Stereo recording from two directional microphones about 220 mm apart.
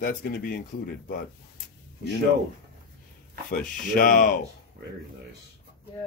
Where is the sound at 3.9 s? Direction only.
40° left (ahead or behind).